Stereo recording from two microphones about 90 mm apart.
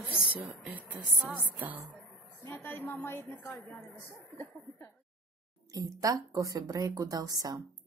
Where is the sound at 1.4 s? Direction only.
20° right (ahead or behind).